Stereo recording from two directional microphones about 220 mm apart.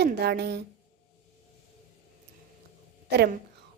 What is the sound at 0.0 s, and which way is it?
Speech, 50° right (ahead or behind).